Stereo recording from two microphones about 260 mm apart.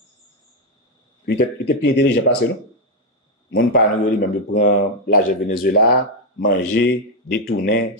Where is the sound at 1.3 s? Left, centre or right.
Left.